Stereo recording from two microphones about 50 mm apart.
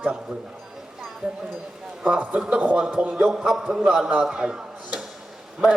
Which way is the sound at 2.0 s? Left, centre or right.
Right.